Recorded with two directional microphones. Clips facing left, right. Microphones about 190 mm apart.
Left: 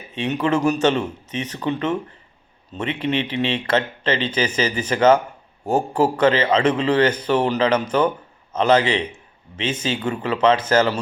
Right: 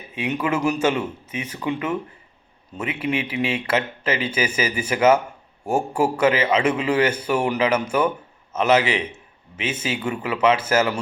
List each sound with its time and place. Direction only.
0.1 s a man's voice: 10° right (ahead or behind)